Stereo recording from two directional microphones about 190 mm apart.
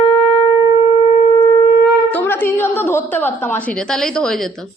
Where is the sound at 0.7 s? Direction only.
35° left (ahead or behind).